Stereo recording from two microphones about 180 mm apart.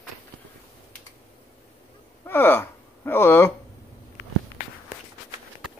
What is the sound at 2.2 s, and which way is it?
Speech, 10° left (ahead or behind).